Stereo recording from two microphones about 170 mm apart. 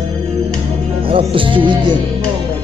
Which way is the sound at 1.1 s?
30° right (ahead or behind).